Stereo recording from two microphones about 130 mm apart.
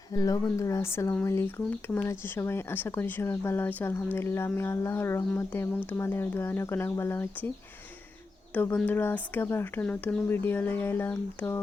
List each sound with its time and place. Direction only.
0.1 s speech: 25° left (ahead or behind)
8.5 s speech: 15° left (ahead or behind)